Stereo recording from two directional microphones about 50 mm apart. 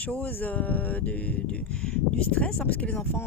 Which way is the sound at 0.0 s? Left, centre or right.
Left.